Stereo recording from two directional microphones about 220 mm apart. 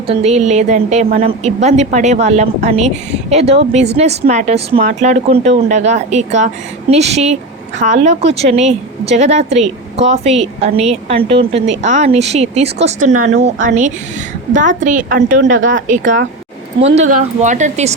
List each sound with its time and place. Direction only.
0.1 s a woman's voice: 30° right (ahead or behind)
17.4 s speech: 35° right (ahead or behind)